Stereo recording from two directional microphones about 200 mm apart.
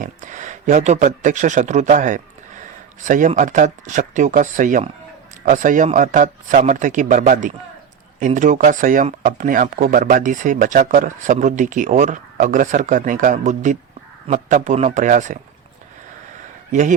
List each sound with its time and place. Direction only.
0.0 s speech: 40° right (ahead or behind)